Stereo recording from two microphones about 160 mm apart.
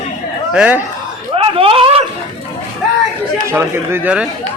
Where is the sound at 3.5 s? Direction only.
15° right (ahead or behind).